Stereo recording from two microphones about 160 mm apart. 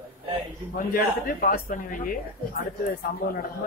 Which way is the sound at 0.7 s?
60° left (ahead or behind).